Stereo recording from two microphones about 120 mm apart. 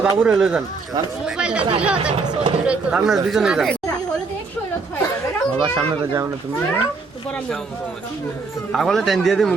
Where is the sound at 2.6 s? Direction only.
5° right (ahead or behind).